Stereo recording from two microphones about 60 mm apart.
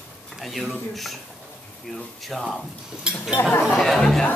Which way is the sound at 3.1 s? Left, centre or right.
Centre.